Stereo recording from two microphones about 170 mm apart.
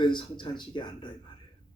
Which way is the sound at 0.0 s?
30° left (ahead or behind).